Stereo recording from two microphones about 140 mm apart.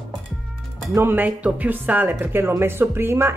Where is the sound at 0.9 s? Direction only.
15° right (ahead or behind).